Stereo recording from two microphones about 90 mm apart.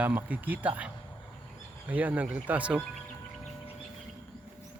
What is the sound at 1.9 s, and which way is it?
Speech, 20° right (ahead or behind).